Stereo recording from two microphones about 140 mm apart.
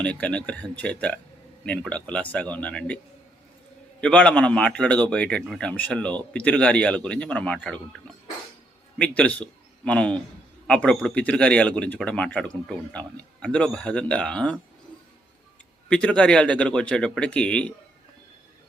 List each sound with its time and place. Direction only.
0.0 s a man's voice: 10° left (ahead or behind)
4.0 s a man's voice: 5° left (ahead or behind)
9.0 s a man's voice: 10° left (ahead or behind)
15.9 s a man's voice: 10° left (ahead or behind)